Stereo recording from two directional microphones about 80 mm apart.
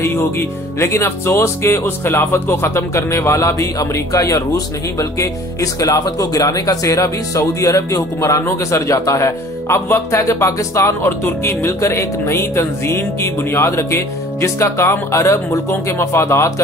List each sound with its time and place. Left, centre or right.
0.0 s speech: left
9.8 s speech: left